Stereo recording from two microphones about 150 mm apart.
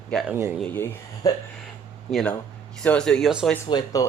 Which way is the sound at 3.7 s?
25° left (ahead or behind).